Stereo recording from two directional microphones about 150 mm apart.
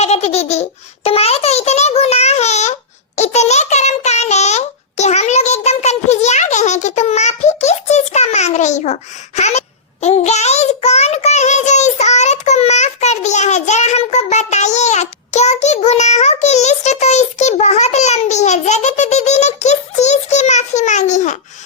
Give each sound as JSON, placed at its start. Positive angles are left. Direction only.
{"t": 0.0, "sound": "babbling", "side_deg": 45}
{"t": 3.2, "sound": "child singing", "side_deg": 50}